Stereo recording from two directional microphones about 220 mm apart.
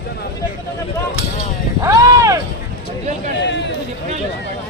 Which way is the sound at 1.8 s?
15° right (ahead or behind).